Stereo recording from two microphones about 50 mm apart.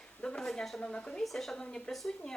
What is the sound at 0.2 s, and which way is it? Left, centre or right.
A woman's voice, centre.